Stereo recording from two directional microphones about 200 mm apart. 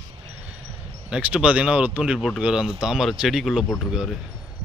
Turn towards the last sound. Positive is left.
turn(degrees=0)  # may be behind; listen again after turning